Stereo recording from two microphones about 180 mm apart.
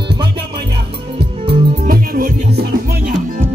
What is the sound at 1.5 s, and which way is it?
Music, 60° right (ahead or behind).